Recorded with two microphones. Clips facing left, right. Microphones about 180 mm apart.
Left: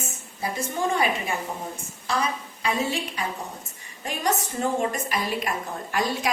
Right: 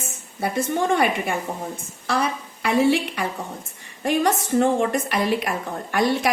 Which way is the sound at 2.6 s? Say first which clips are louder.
Right 8 dB; 65° right (ahead or behind).